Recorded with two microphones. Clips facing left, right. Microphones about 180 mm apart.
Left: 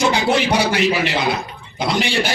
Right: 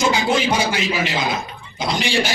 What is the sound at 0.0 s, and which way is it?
Speech, 65° left (ahead or behind).